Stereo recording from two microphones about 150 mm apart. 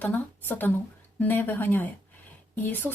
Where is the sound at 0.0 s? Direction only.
10° left (ahead or behind).